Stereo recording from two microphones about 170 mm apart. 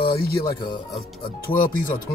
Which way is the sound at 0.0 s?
30° left (ahead or behind).